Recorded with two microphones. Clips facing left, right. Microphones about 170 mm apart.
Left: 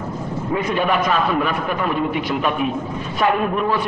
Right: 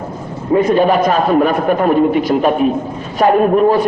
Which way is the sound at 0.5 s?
40° right (ahead or behind).